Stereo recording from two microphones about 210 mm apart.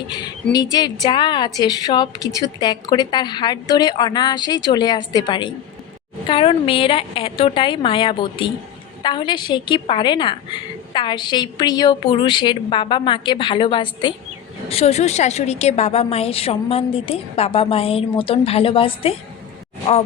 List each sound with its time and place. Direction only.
0.5 s a woman's voice: 20° left (ahead or behind)